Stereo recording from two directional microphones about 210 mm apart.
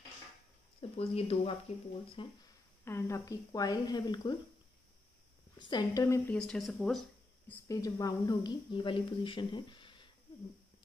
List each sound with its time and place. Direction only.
0.7 s speech: 30° left (ahead or behind)
2.8 s speech: 10° left (ahead or behind)
5.6 s speech: 20° left (ahead or behind); by 7.5 s centre (ahead or behind)
7.6 s speech: 15° left (ahead or behind)